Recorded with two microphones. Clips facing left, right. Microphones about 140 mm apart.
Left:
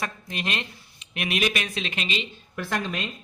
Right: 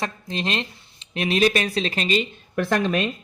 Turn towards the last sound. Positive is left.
turn(degrees=-60)  # may be behind; listen again after turning